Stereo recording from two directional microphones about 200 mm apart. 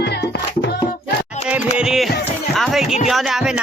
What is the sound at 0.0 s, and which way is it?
Music, 55° left (ahead or behind).